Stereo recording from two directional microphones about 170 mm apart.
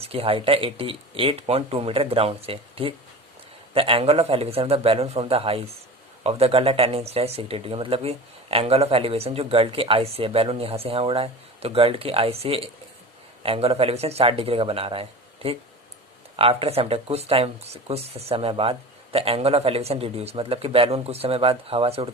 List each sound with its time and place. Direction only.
0.0 s speech: 35° right (ahead or behind)